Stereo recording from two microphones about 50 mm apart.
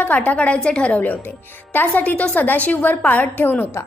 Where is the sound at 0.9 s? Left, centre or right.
Left.